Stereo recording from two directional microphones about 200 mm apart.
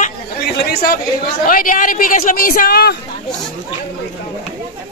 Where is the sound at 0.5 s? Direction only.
50° left (ahead or behind).